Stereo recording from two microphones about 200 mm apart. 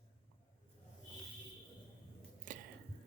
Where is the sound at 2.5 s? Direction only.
40° right (ahead or behind).